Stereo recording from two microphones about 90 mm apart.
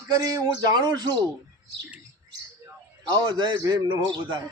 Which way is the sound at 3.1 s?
50° right (ahead or behind).